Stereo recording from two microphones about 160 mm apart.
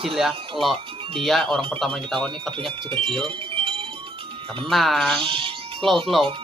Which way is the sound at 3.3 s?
35° right (ahead or behind).